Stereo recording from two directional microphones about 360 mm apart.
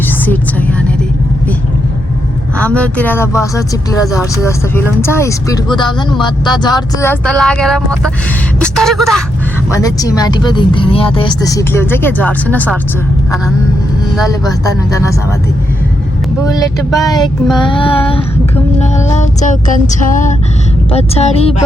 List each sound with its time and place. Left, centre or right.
0.3 s a sound: centre
2.6 s speech: centre
14.3 s speech: centre
17.0 s speech: centre
17.6 s female singing: centre
20.9 s speech: centre